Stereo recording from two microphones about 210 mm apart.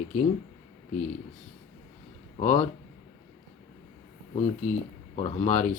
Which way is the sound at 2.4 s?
35° left (ahead or behind).